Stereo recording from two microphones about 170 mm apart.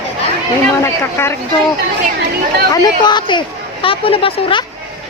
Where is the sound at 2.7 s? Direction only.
25° left (ahead or behind).